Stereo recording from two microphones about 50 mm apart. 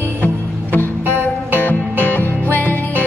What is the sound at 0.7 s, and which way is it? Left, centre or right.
Music, left.